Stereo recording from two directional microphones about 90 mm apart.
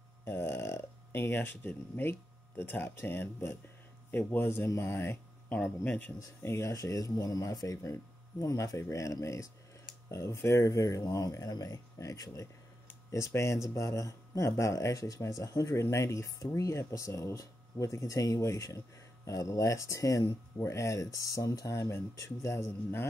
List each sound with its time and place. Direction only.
0.2 s speech: 25° left (ahead or behind)
6.1 s speech: 30° left (ahead or behind)